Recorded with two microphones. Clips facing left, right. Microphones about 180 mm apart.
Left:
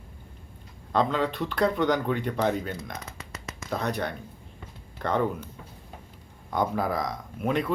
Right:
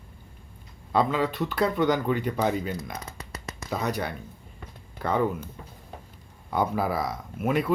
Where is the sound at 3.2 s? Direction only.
35° right (ahead or behind).